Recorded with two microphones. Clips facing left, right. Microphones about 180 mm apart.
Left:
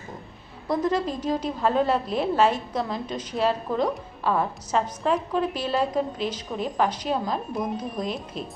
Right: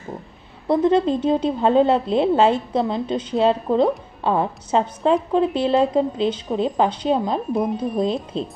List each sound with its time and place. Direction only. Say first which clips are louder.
0.7 s a woman's voice: right 7 dB; 30° right (ahead or behind)